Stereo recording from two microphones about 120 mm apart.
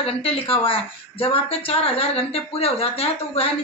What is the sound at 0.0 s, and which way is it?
Speech, 50° left (ahead or behind).